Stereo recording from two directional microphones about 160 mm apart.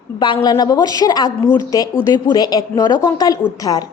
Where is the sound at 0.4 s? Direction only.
25° left (ahead or behind).